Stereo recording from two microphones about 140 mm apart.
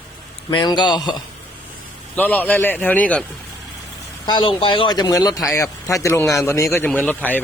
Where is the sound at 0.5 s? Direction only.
30° left (ahead or behind).